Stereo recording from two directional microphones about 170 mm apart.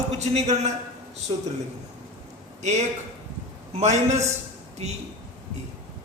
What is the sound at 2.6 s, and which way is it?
A man's voice, 45° right (ahead or behind).